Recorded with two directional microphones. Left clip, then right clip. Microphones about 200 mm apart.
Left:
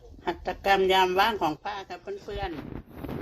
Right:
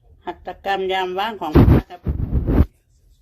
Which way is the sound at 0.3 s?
15° right (ahead or behind).